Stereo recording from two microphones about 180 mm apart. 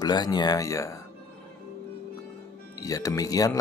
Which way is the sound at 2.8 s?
20° left (ahead or behind).